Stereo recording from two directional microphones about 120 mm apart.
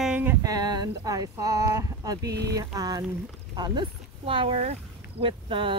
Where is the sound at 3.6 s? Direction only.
45° right (ahead or behind).